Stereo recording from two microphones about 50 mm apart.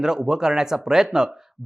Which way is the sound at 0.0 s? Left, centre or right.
Centre.